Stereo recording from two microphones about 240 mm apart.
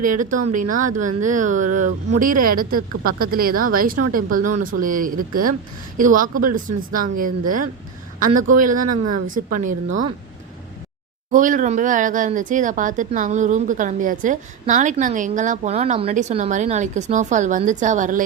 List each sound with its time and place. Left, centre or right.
0.0 s speech: right
8.8 s speech: right
11.3 s speech: right